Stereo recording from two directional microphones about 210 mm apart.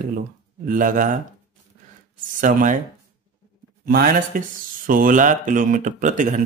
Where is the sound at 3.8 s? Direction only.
45° right (ahead or behind).